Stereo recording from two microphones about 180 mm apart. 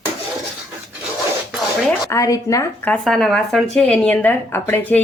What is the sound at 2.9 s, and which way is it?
A woman's voice, centre (ahead or behind).